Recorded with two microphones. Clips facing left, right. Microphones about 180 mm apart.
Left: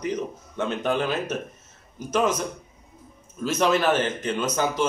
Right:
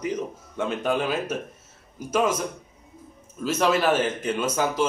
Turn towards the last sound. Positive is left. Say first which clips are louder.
# even
turn(degrees=-5)  # may be behind; listen again after turning